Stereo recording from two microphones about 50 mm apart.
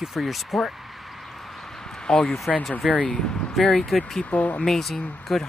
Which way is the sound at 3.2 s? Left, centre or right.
Centre.